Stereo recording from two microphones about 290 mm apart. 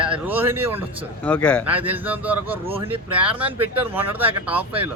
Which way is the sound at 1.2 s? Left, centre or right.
Centre.